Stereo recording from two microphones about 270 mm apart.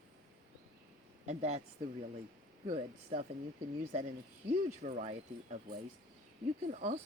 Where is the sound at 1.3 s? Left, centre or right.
Right.